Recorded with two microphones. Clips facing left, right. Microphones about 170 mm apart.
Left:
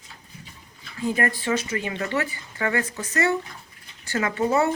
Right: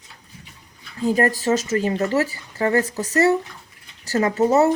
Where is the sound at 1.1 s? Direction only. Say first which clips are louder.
Right 6 dB; 40° right (ahead or behind).